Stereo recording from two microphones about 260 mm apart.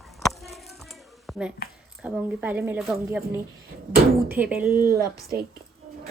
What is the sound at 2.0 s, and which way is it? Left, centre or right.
A woman's voice, centre.